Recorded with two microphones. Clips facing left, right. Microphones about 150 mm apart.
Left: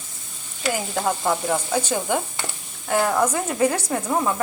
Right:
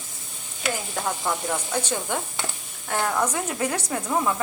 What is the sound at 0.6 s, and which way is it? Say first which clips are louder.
Stir: left 4 dB; 20° left (ahead or behind).